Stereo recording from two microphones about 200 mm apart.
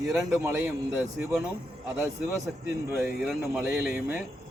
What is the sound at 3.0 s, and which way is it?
Speech, 5° right (ahead or behind).